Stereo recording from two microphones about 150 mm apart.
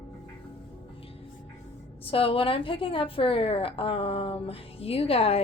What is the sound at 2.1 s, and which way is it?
A woman's voice, 35° left (ahead or behind).